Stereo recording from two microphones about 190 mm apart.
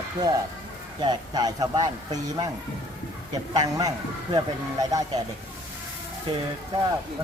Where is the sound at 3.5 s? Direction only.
20° right (ahead or behind).